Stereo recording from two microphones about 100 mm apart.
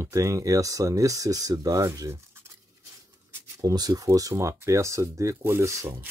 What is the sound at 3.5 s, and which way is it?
Speech, 40° right (ahead or behind).